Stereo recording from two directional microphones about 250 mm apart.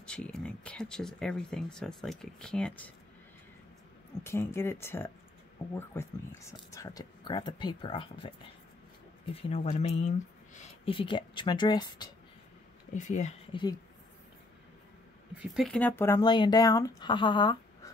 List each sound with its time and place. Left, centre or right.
0.0 s speech: centre
4.2 s speech: centre
9.3 s speech: left
12.9 s speech: left
15.3 s speech: centre